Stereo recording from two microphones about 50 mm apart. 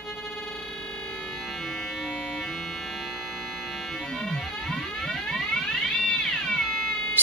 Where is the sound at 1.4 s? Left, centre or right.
Centre.